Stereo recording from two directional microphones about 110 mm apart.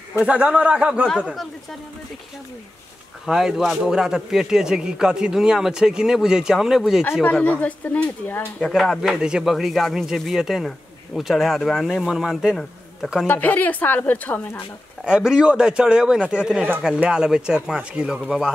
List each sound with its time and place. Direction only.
0.2 s speech: 10° right (ahead or behind)
1.1 s a man's voice: centre (ahead or behind)
3.3 s a man's voice: 5° right (ahead or behind)
7.2 s speech: 15° left (ahead or behind)
8.6 s a man's voice: centre (ahead or behind)
13.3 s speech: 15° left (ahead or behind)
15.0 s speech: 5° right (ahead or behind)